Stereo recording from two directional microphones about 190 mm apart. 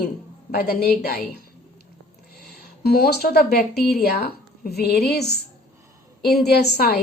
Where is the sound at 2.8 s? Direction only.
55° left (ahead or behind).